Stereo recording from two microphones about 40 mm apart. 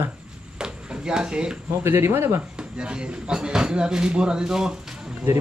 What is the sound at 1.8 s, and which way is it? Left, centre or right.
Speech, right.